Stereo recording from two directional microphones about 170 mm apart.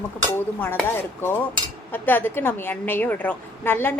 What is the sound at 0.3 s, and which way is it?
Speech, 15° left (ahead or behind).